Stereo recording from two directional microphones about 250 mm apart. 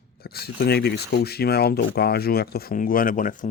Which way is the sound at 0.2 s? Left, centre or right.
Left.